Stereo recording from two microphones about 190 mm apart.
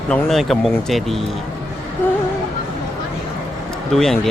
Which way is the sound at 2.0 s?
10° left (ahead or behind).